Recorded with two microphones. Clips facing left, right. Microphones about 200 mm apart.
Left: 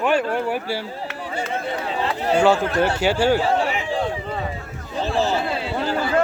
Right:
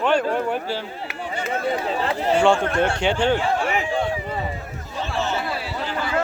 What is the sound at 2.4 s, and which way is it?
Speech, 5° left (ahead or behind).